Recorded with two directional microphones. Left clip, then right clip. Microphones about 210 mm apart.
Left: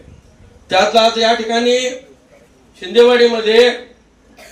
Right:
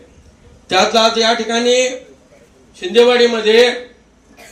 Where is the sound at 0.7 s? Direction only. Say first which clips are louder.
Left 1 dB; 50° right (ahead or behind).